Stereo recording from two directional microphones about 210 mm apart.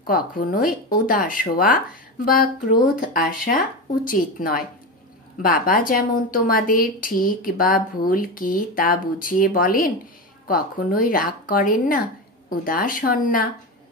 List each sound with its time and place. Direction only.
0.0 s speech: 40° left (ahead or behind)
3.0 s a woman's voice: 40° left (ahead or behind)